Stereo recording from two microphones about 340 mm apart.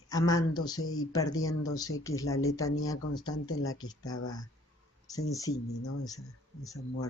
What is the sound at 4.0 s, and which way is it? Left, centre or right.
Speech, left.